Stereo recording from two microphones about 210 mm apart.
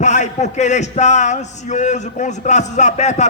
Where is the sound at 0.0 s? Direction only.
35° left (ahead or behind).